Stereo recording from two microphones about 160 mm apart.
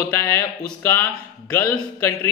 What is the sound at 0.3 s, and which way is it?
A man's voice, 15° left (ahead or behind).